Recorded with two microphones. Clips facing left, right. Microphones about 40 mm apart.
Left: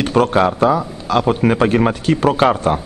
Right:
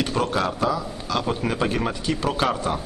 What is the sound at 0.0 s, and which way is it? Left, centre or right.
A man's voice, left.